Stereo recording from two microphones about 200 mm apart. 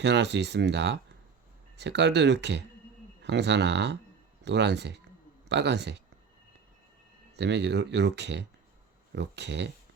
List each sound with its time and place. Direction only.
0.0 s speech: 60° right (ahead or behind)
7.3 s speech: 60° right (ahead or behind)